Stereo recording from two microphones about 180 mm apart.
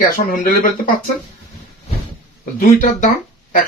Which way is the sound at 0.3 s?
50° left (ahead or behind).